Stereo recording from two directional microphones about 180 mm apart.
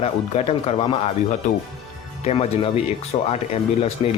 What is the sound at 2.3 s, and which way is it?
A man's voice, 35° left (ahead or behind).